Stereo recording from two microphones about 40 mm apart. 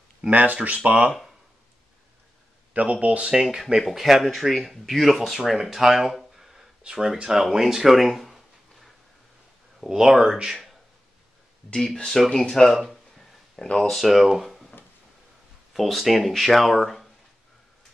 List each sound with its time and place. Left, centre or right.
0.3 s speech: right
2.7 s speech: right
3.5 s speech: centre
6.8 s speech: centre
11.7 s speech: centre
12.7 s speech: centre
13.7 s speech: centre
14.0 s speech: centre
15.7 s speech: centre